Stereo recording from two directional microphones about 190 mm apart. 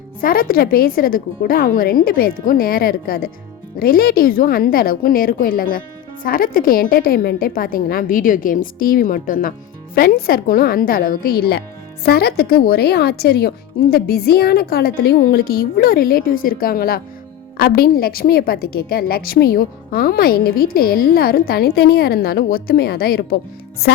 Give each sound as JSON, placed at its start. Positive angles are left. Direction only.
{"t": 0.2, "sound": "a woman's voice", "side_deg": 50}